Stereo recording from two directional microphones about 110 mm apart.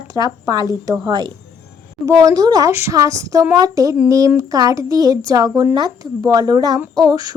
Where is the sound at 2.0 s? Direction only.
30° right (ahead or behind).